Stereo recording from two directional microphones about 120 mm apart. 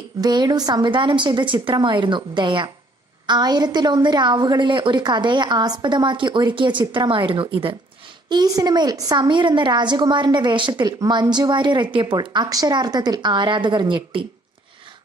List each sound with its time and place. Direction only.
0.2 s a woman's voice: 35° right (ahead or behind)
8.3 s a woman's voice: 35° right (ahead or behind)